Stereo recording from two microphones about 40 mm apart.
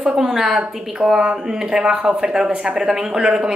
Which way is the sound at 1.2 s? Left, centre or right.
Right.